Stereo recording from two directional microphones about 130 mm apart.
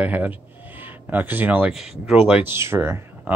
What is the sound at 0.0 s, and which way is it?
Speech, 10° right (ahead or behind).